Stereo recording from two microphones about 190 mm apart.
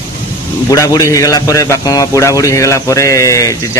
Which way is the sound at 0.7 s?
15° left (ahead or behind).